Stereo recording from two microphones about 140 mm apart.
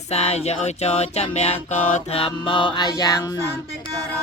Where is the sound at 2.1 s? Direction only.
35° left (ahead or behind).